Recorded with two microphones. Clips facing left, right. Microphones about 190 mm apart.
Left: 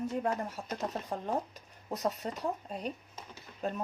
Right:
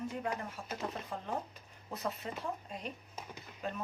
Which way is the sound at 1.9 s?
40° left (ahead or behind).